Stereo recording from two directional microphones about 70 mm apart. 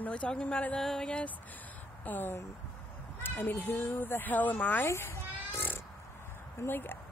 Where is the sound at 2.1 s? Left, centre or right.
Left.